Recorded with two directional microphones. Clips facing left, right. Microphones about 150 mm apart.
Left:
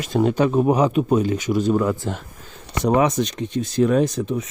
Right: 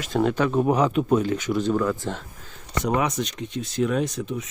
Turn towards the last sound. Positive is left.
turn(degrees=40)  # may be behind; listen again after turning